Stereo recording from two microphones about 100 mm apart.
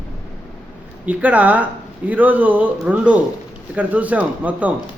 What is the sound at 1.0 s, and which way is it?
Speech, 15° right (ahead or behind).